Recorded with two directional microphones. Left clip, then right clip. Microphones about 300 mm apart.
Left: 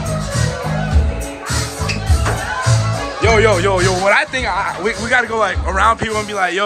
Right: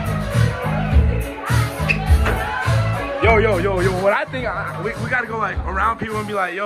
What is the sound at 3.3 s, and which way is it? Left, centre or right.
Speech, centre.